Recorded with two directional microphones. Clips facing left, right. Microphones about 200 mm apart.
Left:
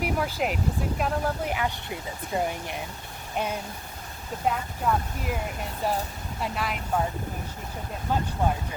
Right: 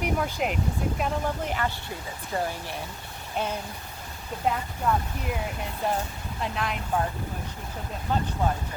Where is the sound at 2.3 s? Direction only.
15° left (ahead or behind).